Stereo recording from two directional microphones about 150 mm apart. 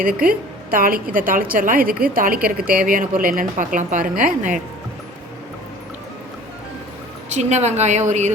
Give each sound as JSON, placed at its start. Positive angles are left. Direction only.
{"t": 0.0, "sound": "a woman's voice", "side_deg": -70}
{"t": 7.3, "sound": "a woman's voice", "side_deg": -50}